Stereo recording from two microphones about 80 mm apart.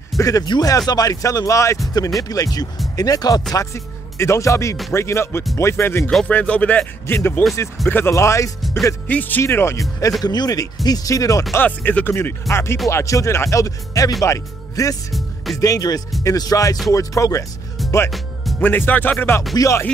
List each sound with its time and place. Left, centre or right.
0.2 s speech: left
2.2 s speech: left
3.5 s speech: left
6.2 s speech: centre
7.2 s speech: left
9.0 s speech: left
9.8 s speech: left
10.2 s speech: left
11.5 s speech: left
15.1 s music: centre
15.6 s speech: left
18.1 s music: centre
18.6 s speech: left
19.5 s speech: left